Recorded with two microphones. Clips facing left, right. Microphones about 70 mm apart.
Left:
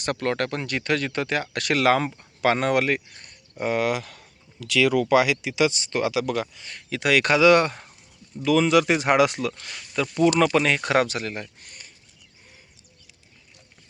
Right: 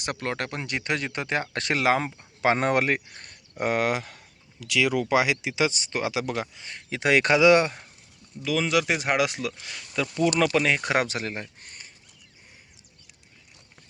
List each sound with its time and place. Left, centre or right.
0.0 s speech: centre; by 1.8 s right
1.8 s speech: centre; by 4.0 s right
4.0 s a sound: centre
4.6 s speech: centre
8.4 s speech: centre
10.7 s speech: centre; by 11.9 s right